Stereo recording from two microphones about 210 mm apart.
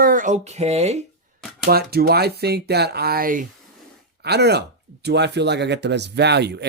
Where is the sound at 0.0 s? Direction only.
40° right (ahead or behind).